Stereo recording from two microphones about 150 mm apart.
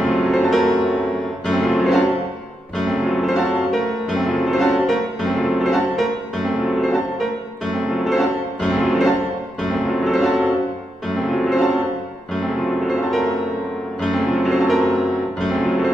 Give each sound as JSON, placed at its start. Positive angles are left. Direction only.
{"t": 0.0, "sound": "music", "side_deg": 0}